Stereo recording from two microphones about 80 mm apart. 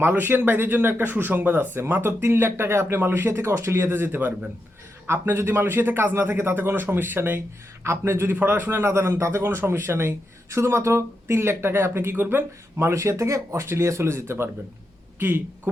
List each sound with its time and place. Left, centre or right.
0.0 s a man's voice: right